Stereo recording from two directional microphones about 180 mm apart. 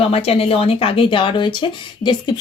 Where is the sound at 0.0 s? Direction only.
35° left (ahead or behind).